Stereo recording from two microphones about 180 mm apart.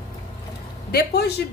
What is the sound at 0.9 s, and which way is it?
Speech, 65° left (ahead or behind).